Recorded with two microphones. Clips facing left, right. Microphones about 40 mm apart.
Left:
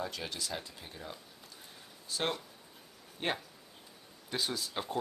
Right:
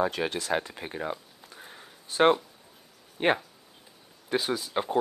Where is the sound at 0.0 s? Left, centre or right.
Right.